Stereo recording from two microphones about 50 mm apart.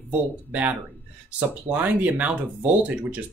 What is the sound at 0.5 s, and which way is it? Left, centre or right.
Speech, right.